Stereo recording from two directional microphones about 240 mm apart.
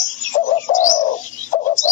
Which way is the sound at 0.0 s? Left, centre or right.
Left.